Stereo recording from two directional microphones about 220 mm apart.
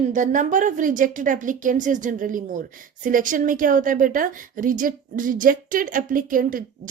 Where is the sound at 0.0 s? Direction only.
35° right (ahead or behind).